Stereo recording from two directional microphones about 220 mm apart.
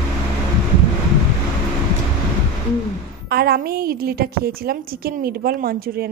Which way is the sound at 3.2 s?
45° right (ahead or behind).